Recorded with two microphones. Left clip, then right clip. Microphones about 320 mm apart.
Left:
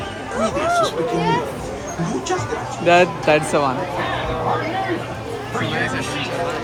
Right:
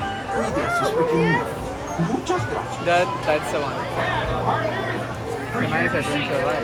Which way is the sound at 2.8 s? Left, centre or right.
Left.